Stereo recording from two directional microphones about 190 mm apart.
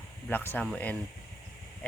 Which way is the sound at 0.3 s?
10° left (ahead or behind).